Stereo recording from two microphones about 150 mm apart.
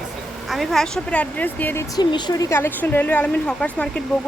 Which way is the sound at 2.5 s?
15° left (ahead or behind).